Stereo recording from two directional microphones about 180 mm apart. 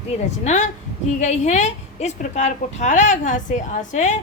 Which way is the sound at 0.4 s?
40° left (ahead or behind).